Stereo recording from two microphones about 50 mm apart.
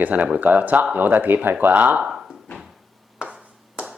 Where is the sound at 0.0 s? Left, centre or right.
Right.